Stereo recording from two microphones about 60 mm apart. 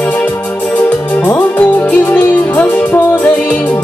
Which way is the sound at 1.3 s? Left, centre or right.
Left.